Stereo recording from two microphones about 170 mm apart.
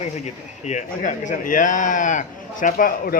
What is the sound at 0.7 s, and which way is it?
A man's voice, 45° left (ahead or behind).